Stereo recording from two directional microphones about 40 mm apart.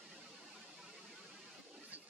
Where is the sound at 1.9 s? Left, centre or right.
Right.